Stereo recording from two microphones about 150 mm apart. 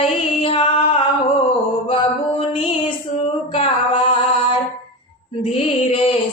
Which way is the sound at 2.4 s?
35° left (ahead or behind).